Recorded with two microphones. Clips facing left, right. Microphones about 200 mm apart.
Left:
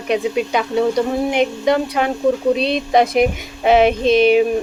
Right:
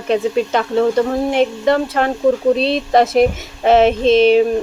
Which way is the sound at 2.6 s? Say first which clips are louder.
Right 2 dB; 25° right (ahead or behind).